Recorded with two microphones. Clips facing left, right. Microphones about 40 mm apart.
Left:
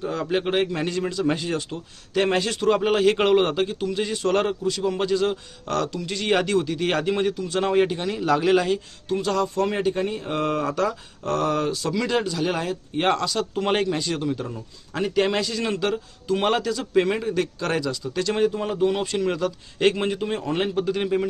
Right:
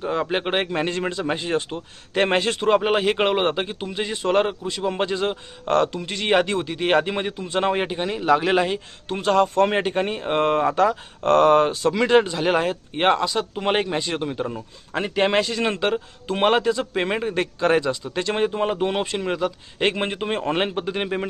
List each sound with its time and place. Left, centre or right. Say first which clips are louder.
0.0 s a man's voice: right 1 dB; right
9.0 s a man's voice: right 4 dB; right
11.2 s a man's voice: right 8 dB; right
13.1 s a man's voice: right 3 dB; right